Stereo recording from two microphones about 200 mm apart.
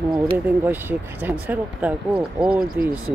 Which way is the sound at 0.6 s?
10° right (ahead or behind).